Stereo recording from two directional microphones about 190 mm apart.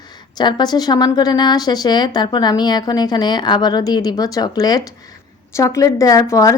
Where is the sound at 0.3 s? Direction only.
20° left (ahead or behind).